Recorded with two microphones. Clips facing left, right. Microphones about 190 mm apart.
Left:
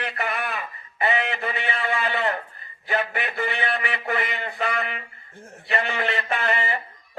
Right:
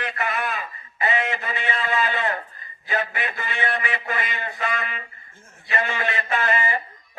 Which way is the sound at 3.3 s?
60° left (ahead or behind).